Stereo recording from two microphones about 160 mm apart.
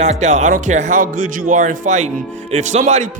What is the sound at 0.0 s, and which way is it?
Speech, 45° right (ahead or behind).